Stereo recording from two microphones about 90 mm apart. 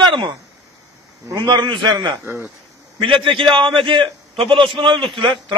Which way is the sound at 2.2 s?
25° right (ahead or behind).